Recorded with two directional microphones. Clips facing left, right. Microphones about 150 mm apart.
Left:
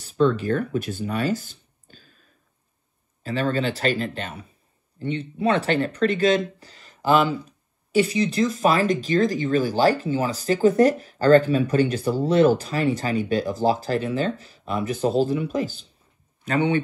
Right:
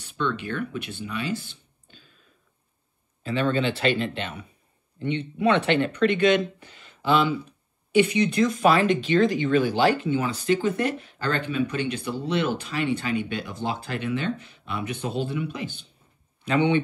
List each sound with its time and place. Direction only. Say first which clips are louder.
0.0 s speech: left 8 dB; 35° left (ahead or behind)
3.3 s speech: even; 40° left (ahead or behind)